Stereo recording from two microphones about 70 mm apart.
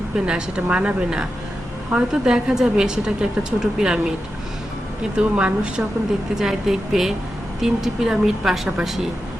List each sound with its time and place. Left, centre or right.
0.3 s a woman's voice: centre
5.1 s a woman's voice: centre
6.3 s speech: centre